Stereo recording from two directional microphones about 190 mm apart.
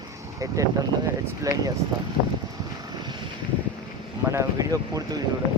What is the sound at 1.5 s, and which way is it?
Speech, 20° right (ahead or behind).